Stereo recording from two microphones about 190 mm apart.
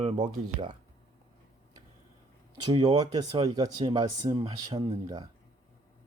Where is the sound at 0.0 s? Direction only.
30° right (ahead or behind).